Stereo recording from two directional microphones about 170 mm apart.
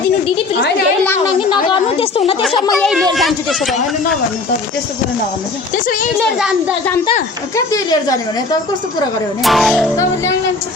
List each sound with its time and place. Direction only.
1.4 s a sound: 30° left (ahead or behind)
2.7 s speech: centre (ahead or behind)
5.7 s speech: 50° left (ahead or behind)
7.5 s speech: 20° left (ahead or behind)
9.4 s speech: centre (ahead or behind)